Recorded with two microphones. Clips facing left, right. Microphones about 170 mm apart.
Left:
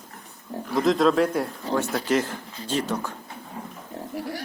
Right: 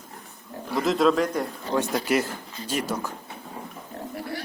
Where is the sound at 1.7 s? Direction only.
15° right (ahead or behind).